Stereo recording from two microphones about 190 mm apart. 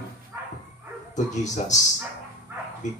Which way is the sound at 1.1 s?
40° left (ahead or behind).